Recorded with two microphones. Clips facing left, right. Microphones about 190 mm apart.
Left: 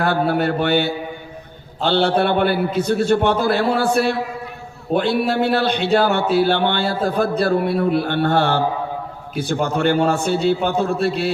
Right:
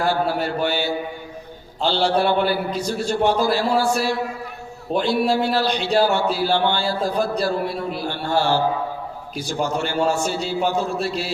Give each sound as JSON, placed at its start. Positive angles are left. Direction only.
{"t": 0.0, "sound": "a man's voice", "side_deg": 60}